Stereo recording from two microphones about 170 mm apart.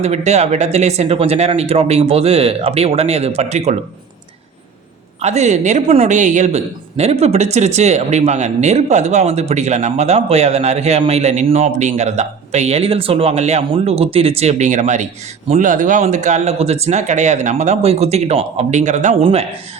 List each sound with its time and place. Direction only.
0.0 s speech: 40° right (ahead or behind)
5.2 s speech: 40° right (ahead or behind)